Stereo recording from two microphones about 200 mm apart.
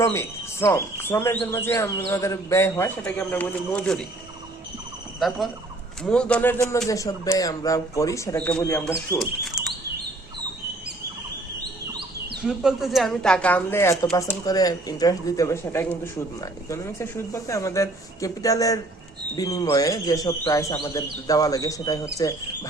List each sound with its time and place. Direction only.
0.0 s speech: 15° left (ahead or behind)
5.2 s speech: centre (ahead or behind)
9.6 s chirp: centre (ahead or behind)
12.4 s speech: centre (ahead or behind); by 22.1 s 15° left (ahead or behind)